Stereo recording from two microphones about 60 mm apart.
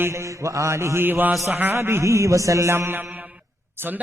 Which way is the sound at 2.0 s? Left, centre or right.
Right.